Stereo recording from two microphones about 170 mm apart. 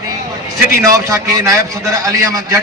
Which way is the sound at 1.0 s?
15° right (ahead or behind).